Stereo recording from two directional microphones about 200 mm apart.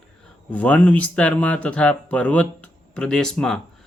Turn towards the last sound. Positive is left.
turn(degrees=0)  # may be behind; listen again after turning